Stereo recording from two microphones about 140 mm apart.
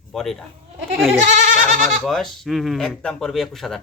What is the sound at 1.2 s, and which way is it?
Speech, 55° right (ahead or behind).